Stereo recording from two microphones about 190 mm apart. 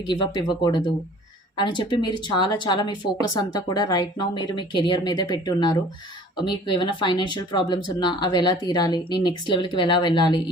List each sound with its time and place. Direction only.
0.1 s speech: 25° left (ahead or behind)